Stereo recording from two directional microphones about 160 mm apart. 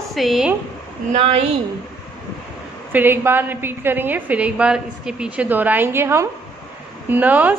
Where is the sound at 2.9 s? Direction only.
10° right (ahead or behind).